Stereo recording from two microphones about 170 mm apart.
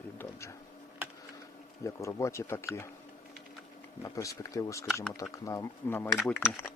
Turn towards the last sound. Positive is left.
turn(degrees=15)  # may be behind; listen again after turning